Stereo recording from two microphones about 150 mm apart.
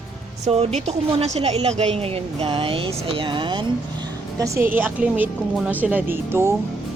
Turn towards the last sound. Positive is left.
turn(degrees=-15)  # may be behind; listen again after turning